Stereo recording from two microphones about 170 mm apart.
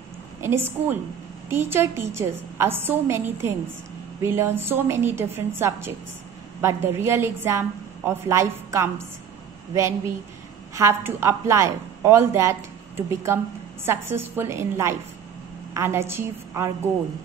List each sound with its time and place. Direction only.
0.4 s a woman's voice: 15° right (ahead or behind)